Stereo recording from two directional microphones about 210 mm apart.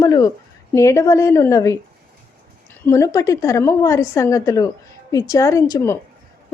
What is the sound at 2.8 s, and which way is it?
Speech, 15° left (ahead or behind).